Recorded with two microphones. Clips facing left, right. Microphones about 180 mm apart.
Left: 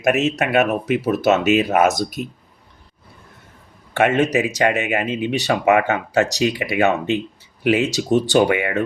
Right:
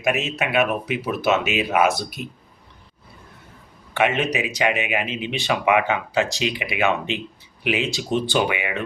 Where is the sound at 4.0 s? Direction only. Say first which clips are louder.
Left 5 dB; 45° left (ahead or behind).